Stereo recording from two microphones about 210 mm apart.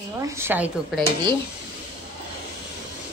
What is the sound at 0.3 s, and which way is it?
Speech, 10° right (ahead or behind).